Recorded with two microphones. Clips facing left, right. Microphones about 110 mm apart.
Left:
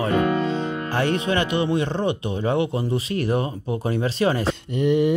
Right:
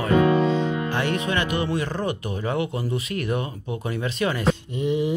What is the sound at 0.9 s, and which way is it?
Speech, 30° left (ahead or behind).